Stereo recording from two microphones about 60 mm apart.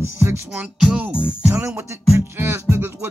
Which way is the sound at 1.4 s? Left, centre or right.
Right.